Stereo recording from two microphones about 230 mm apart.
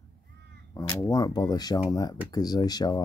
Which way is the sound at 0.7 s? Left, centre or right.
Centre.